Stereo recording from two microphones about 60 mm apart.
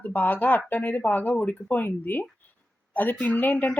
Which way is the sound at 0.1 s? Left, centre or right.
Left.